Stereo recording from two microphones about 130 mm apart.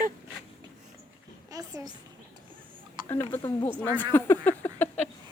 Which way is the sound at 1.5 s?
25° right (ahead or behind).